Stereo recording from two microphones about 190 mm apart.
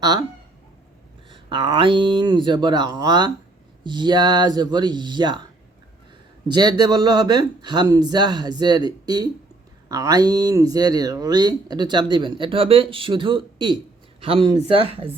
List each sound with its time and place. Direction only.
0.0 s speech: 20° right (ahead or behind)
1.3 s speech: 25° right (ahead or behind)
6.5 s speech: 20° right (ahead or behind)